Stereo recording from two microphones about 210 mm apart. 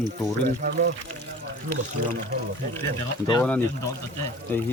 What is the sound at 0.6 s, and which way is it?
Pour, 50° right (ahead or behind).